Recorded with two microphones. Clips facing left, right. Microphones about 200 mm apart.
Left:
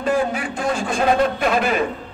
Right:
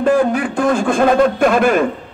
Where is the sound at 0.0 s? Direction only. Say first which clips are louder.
Right 6 dB; 50° right (ahead or behind).